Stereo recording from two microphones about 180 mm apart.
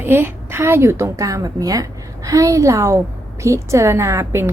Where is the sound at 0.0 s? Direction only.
10° right (ahead or behind).